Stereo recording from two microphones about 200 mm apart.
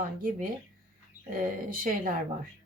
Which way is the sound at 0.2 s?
45° right (ahead or behind).